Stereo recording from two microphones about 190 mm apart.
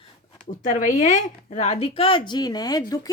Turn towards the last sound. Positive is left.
turn(degrees=20)  # may be behind; listen again after turning